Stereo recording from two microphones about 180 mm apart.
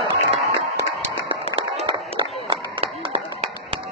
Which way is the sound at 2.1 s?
30° right (ahead or behind).